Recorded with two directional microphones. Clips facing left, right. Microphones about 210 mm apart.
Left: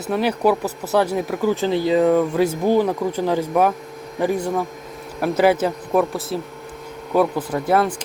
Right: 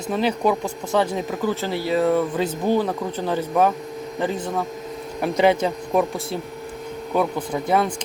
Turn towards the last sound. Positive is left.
turn(degrees=5)  # may be behind; listen again after turning